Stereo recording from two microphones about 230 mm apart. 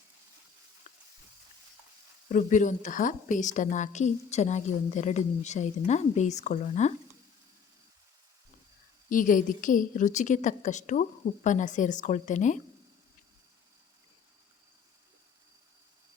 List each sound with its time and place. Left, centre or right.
0.9 s a sound: left
2.3 s a woman's voice: left
9.0 s a woman's voice: left